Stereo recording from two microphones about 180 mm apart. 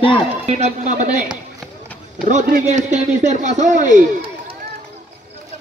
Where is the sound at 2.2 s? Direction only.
45° right (ahead or behind).